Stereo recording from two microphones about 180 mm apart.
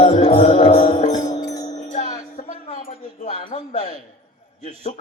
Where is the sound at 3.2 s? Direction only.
40° left (ahead or behind).